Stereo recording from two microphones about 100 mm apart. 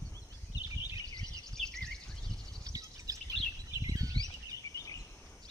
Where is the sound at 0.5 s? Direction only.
40° left (ahead or behind).